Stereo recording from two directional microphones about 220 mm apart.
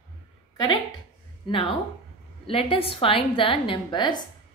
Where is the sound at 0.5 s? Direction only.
20° left (ahead or behind).